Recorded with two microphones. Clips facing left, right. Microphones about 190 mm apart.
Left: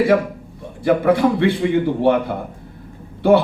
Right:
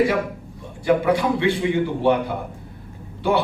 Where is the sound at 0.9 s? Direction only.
55° left (ahead or behind).